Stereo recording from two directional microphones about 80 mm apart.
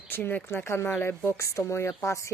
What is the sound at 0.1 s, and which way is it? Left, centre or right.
A woman's voice, left.